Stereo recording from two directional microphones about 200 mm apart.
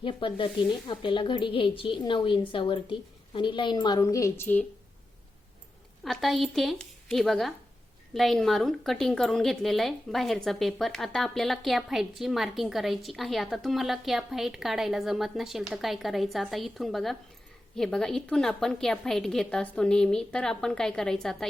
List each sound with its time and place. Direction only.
0.0 s speech: 25° left (ahead or behind)
6.0 s a woman's voice: centre (ahead or behind)